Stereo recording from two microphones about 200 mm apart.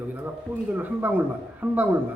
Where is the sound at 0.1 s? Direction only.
10° right (ahead or behind).